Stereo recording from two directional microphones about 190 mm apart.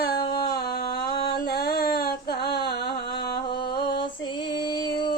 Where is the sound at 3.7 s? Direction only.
60° left (ahead or behind).